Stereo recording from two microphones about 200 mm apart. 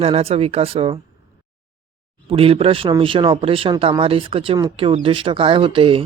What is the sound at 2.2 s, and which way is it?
Speech, 25° right (ahead or behind).